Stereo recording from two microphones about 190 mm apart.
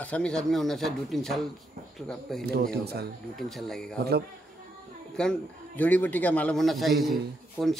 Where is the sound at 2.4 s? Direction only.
55° right (ahead or behind).